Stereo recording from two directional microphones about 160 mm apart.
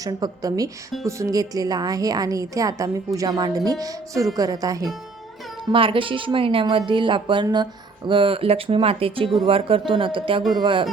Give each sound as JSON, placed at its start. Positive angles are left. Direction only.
{"t": 0.0, "sound": "a woman's voice", "side_deg": -25}
{"t": 5.7, "sound": "a woman's voice", "side_deg": -35}